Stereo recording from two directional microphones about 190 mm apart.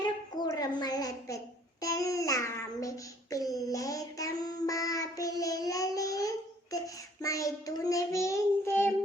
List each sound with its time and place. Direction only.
0.4 s a child's voice: 20° left (ahead or behind)
1.8 s child singing: 15° left (ahead or behind)